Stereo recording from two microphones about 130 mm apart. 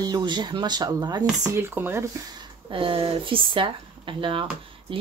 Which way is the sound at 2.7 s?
40° right (ahead or behind).